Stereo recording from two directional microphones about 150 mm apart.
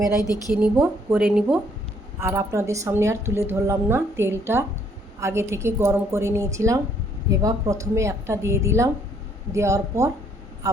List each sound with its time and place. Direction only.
0.2 s a woman's voice: 25° left (ahead or behind)
0.5 s a woman's voice: 10° right (ahead or behind)
2.2 s a woman's voice: 20° right (ahead or behind)